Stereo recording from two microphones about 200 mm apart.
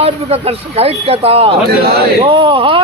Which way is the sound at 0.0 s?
30° right (ahead or behind).